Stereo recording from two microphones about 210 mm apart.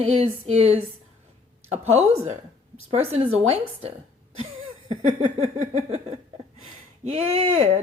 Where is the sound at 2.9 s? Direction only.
30° right (ahead or behind).